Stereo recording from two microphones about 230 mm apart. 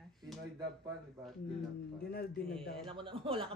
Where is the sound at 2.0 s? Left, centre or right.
Left.